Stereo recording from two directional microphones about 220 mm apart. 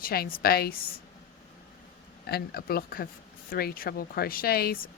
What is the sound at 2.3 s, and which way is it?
Speech, 45° left (ahead or behind).